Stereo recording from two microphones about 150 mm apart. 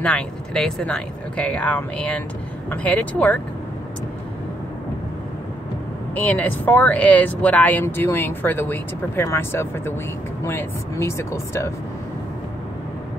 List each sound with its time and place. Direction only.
0.0 s speech: 5° left (ahead or behind)
6.1 s speech: 10° left (ahead or behind)